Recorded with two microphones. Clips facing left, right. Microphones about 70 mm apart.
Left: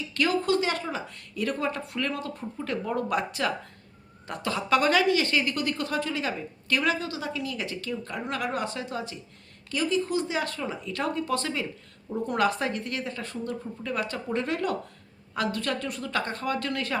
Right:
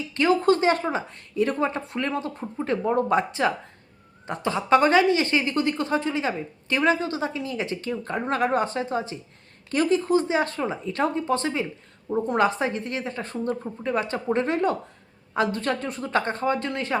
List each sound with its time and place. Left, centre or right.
0.1 s a woman's voice: right
9.6 s a woman's voice: right